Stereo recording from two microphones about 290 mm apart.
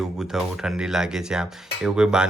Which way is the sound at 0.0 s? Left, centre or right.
Centre.